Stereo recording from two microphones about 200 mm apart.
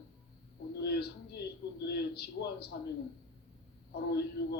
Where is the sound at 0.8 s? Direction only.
55° left (ahead or behind).